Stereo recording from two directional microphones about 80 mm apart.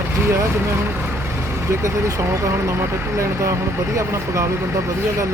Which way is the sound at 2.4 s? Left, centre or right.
Right.